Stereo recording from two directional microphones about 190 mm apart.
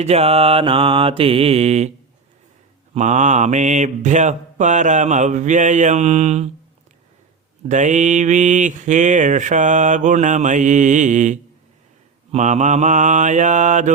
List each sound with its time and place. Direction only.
0.0 s mantra: 35° right (ahead or behind)
2.9 s mantra: 40° right (ahead or behind)
7.7 s mantra: 40° right (ahead or behind)